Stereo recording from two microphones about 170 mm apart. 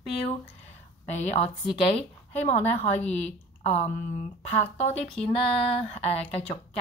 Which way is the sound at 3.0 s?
10° left (ahead or behind).